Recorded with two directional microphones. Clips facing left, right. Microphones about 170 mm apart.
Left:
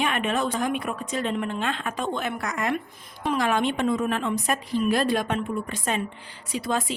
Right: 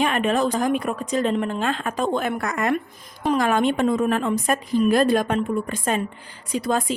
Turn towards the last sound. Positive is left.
turn(degrees=-45)  # may be behind; listen again after turning